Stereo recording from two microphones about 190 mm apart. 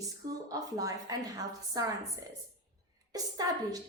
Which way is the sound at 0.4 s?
20° right (ahead or behind).